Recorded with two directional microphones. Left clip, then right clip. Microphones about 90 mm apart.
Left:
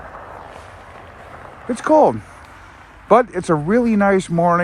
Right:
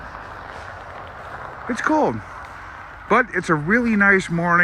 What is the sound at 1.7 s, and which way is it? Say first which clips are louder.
Speech: left 6 dB; 15° left (ahead or behind).